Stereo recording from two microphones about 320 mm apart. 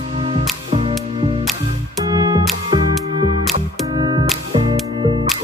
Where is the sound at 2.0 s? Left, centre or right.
Centre.